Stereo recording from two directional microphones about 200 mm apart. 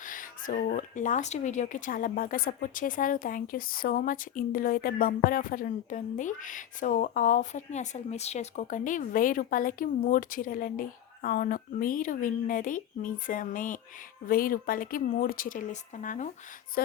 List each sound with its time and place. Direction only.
0.0 s speech: 40° left (ahead or behind)